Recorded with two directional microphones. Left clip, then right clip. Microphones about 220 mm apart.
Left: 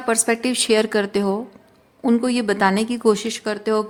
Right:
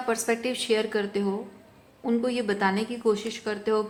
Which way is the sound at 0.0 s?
50° left (ahead or behind).